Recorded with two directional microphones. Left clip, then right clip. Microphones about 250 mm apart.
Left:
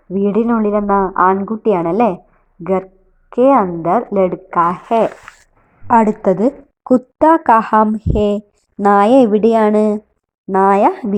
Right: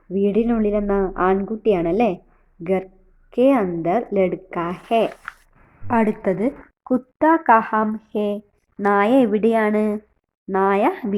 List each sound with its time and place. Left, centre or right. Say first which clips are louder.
0.1 s a woman's voice: left 4 dB; centre